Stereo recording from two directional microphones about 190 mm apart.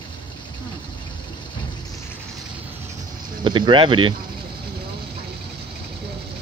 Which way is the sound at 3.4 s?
25° right (ahead or behind).